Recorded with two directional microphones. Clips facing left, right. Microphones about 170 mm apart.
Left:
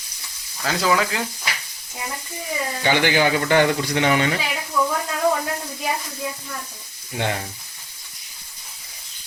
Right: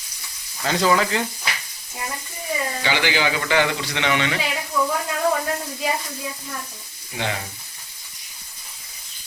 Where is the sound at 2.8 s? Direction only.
50° left (ahead or behind).